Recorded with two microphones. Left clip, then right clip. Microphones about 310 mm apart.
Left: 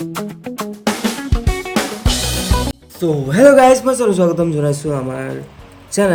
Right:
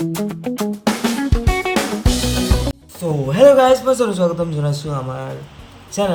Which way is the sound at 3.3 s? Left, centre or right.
Right.